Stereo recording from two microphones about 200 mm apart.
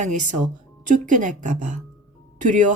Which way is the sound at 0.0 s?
40° right (ahead or behind).